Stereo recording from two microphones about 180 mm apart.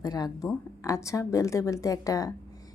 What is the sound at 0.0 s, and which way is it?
A woman's voice, 20° left (ahead or behind).